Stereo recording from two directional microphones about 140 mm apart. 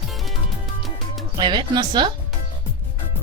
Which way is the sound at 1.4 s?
30° right (ahead or behind).